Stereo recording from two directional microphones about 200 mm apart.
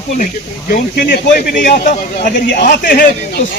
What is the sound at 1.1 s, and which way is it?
Speech, 50° left (ahead or behind).